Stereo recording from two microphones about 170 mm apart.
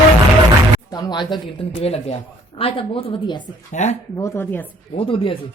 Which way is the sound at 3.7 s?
45° left (ahead or behind).